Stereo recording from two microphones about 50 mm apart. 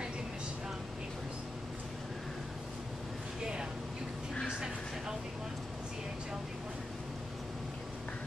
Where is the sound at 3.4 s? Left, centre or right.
Centre.